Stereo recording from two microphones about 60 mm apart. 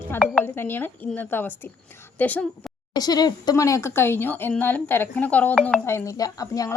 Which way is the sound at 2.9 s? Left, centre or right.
Left.